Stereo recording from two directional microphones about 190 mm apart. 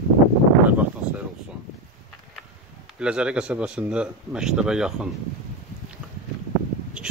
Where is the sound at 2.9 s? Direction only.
5° right (ahead or behind).